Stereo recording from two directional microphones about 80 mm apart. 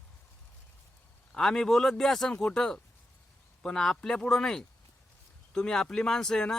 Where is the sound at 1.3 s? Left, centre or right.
Centre.